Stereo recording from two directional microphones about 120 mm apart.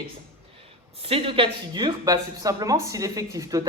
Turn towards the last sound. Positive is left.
turn(degrees=-30)  # may be behind; listen again after turning